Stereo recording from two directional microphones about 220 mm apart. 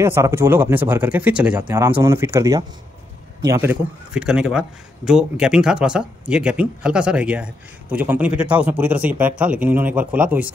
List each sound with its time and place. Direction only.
0.0 s speech: 10° right (ahead or behind)
1.7 s speech: 15° right (ahead or behind)